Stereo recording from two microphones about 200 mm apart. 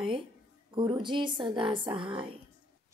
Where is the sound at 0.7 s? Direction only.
25° right (ahead or behind).